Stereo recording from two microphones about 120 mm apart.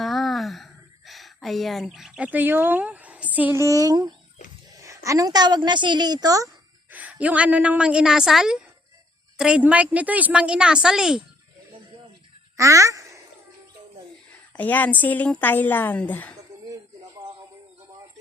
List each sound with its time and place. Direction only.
0.0 s a sound: centre (ahead or behind)
3.6 s a woman's voice: 30° right (ahead or behind)
6.9 s a woman's voice: 10° right (ahead or behind)
12.5 s speech: 25° right (ahead or behind)
14.5 s a woman's voice: 15° left (ahead or behind)